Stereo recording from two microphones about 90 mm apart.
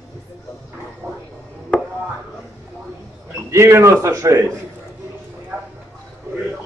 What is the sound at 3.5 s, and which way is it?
A man's voice, 30° right (ahead or behind).